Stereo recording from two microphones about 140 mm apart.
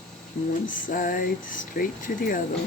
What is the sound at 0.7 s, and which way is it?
Speech, 75° left (ahead or behind).